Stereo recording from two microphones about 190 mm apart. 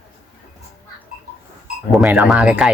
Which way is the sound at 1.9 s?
5° right (ahead or behind).